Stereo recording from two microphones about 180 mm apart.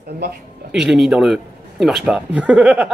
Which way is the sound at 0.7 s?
Centre (ahead or behind).